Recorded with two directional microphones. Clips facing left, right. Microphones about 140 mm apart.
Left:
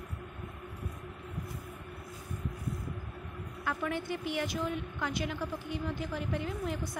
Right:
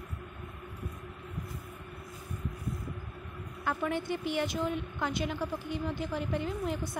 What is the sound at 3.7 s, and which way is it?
A woman's voice, 30° right (ahead or behind).